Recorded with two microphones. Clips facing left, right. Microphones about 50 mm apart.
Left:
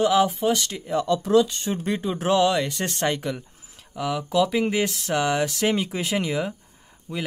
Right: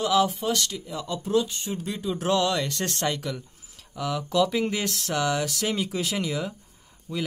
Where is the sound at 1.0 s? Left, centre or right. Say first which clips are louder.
Left 5 dB; left.